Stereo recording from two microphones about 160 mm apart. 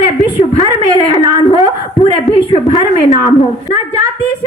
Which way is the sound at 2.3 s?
40° left (ahead or behind).